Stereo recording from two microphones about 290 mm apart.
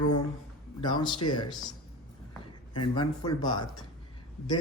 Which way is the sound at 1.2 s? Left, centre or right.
Left.